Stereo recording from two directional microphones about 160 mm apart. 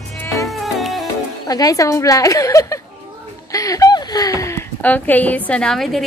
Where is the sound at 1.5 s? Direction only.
25° left (ahead or behind).